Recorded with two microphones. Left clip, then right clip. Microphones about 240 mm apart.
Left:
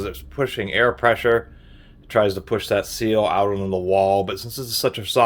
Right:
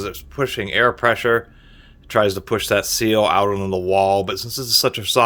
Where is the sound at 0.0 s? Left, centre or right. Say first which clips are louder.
Right 1 dB; centre.